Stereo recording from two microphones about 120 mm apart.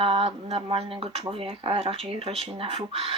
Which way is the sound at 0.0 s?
50° right (ahead or behind).